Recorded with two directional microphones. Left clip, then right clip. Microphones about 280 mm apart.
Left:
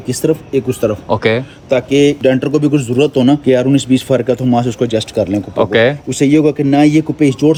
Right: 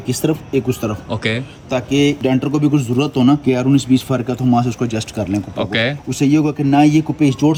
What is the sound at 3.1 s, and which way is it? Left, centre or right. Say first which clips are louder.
Speech: left 3 dB; right.